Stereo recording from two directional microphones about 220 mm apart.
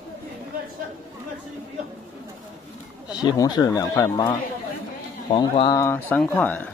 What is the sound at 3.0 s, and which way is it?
Speech, 15° left (ahead or behind).